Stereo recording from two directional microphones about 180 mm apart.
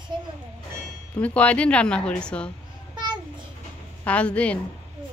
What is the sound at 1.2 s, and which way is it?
Speech, 5° left (ahead or behind).